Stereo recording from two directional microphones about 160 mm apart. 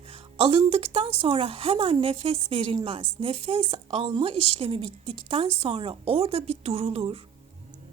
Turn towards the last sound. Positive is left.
turn(degrees=-35)  # may be behind; listen again after turning